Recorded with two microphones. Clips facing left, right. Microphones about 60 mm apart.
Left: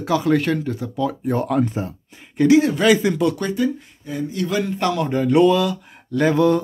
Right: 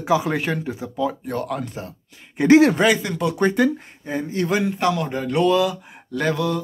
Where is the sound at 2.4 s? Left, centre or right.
Centre.